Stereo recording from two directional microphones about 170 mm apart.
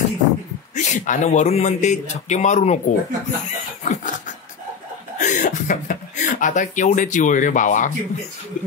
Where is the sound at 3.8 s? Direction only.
45° left (ahead or behind).